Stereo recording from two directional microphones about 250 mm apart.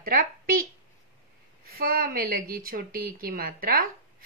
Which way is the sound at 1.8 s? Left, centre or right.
Right.